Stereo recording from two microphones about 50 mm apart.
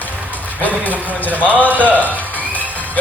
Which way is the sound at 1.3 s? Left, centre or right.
Right.